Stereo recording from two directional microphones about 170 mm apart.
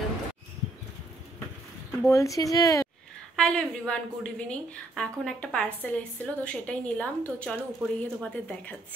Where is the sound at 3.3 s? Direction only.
5° left (ahead or behind).